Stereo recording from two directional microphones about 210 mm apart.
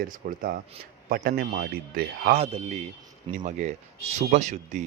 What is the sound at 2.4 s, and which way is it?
Speech, 30° right (ahead or behind).